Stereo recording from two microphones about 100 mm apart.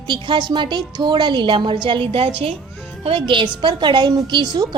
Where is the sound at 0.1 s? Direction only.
50° right (ahead or behind).